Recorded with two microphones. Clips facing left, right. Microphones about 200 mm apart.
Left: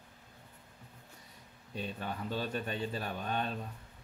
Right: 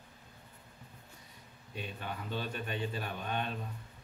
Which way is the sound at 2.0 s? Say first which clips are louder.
Left 1 dB; 40° left (ahead or behind).